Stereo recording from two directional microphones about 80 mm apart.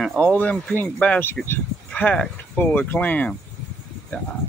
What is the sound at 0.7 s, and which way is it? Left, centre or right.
Speech, left.